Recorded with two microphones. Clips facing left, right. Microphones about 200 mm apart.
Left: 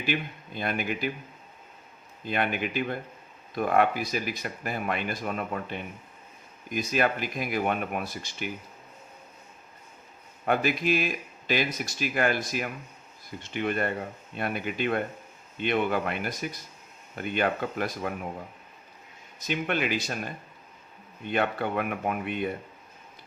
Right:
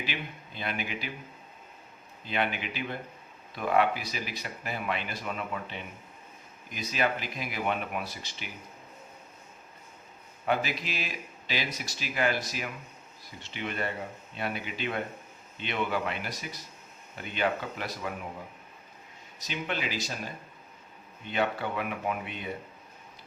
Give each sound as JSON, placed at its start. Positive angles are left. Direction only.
{"t": 0.0, "sound": "speech", "side_deg": 50}
{"t": 2.2, "sound": "speech", "side_deg": 50}
{"t": 10.4, "sound": "speech", "side_deg": 50}
{"t": 19.4, "sound": "speech", "side_deg": 55}